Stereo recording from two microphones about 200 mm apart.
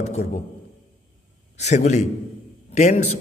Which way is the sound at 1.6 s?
35° left (ahead or behind).